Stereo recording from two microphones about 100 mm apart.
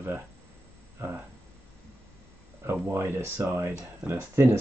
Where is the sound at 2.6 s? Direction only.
25° right (ahead or behind).